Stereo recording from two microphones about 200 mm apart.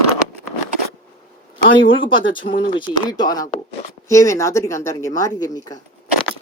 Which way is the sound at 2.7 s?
20° left (ahead or behind).